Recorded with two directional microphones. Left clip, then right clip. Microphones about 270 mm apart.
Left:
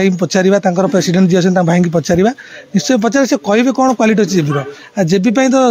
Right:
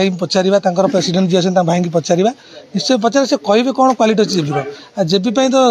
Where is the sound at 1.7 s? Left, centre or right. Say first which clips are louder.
Left 2 dB; left.